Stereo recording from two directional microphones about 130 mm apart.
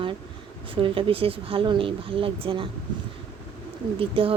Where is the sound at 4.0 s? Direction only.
45° right (ahead or behind).